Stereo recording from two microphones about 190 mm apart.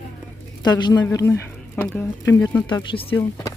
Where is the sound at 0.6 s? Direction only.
20° left (ahead or behind).